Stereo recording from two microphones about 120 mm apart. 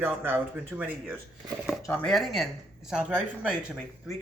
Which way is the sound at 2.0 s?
Centre (ahead or behind).